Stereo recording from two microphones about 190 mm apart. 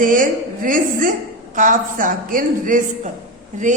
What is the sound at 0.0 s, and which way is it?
A woman's voice, 45° right (ahead or behind).